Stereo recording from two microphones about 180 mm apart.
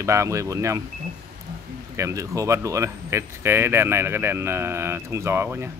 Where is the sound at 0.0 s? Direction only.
15° right (ahead or behind).